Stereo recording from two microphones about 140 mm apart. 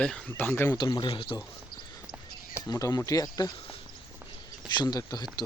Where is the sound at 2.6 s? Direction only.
25° left (ahead or behind).